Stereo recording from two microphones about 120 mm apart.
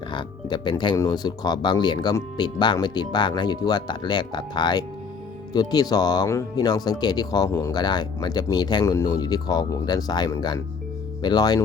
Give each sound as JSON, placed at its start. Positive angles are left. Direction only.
{"t": 0.1, "sound": "speech", "side_deg": 40}
{"t": 8.8, "sound": "speech", "side_deg": 25}